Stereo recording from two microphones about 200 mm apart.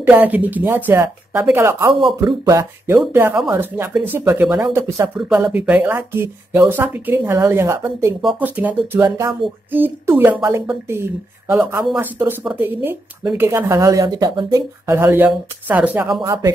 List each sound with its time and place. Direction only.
0.0 s speech: 10° right (ahead or behind)
16.2 s speech: 20° right (ahead or behind)